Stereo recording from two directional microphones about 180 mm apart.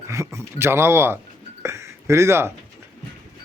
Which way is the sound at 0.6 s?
15° right (ahead or behind).